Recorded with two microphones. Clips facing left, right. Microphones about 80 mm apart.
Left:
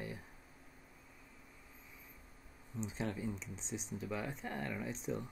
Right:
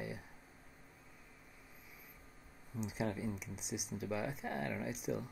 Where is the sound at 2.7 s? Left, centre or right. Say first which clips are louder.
Right 1 dB; centre.